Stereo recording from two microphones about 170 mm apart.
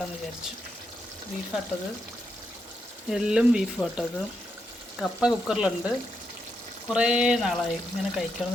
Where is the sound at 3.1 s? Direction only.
5° right (ahead or behind).